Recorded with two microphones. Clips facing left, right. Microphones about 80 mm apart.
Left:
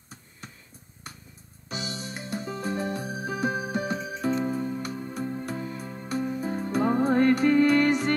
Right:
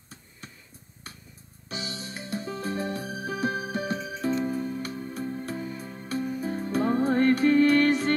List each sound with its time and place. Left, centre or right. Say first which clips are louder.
1.7 s music: left 2 dB; centre